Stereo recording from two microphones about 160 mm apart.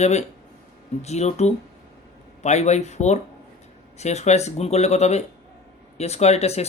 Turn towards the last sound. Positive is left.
turn(degrees=40)  # may be behind; listen again after turning